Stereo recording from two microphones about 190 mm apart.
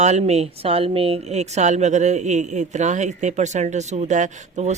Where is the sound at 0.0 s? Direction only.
35° right (ahead or behind).